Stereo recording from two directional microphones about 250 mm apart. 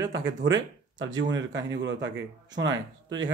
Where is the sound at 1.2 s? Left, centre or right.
Right.